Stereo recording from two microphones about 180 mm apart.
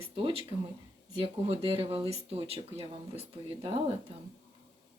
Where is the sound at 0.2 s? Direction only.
25° right (ahead or behind).